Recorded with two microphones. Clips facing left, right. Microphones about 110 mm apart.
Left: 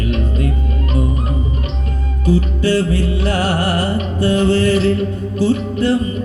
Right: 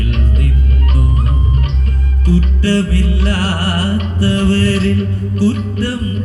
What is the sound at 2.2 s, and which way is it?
Music, 20° left (ahead or behind).